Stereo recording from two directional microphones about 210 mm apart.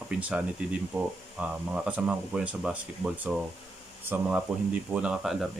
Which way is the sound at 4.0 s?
10° right (ahead or behind).